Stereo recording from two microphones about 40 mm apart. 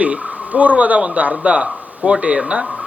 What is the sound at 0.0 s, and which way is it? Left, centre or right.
Speech, right.